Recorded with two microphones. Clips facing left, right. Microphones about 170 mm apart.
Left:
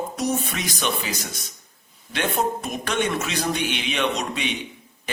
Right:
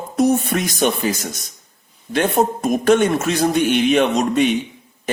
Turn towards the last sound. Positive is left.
turn(degrees=-45)  # may be behind; listen again after turning